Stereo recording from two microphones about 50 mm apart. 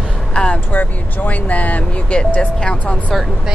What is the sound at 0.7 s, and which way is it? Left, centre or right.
Speech, left.